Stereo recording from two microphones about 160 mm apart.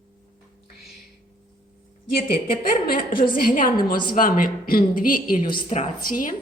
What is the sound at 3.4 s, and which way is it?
A woman's voice, 60° left (ahead or behind).